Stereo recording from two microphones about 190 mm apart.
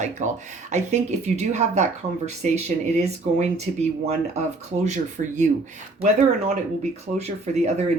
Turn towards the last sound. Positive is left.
turn(degrees=-35)  # may be behind; listen again after turning